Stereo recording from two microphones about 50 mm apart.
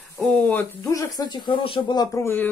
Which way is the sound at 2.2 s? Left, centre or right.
Left.